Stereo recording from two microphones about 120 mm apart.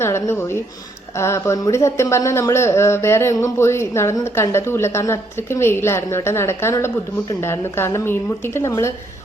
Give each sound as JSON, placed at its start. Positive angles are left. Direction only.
{"t": 0.0, "sound": "a woman's voice", "side_deg": 20}